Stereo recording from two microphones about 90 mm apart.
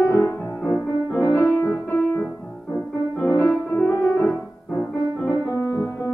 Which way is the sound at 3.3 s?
30° left (ahead or behind).